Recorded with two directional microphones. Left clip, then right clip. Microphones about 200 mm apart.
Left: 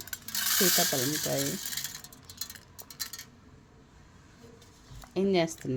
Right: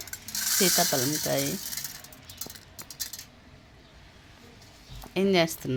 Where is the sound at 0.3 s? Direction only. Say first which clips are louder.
Right 2 dB; 25° left (ahead or behind).